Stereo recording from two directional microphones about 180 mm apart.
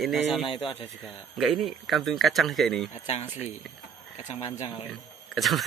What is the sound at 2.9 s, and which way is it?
Speech, 35° left (ahead or behind).